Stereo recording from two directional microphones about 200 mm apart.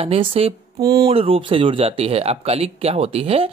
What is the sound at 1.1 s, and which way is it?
Speech, 30° right (ahead or behind).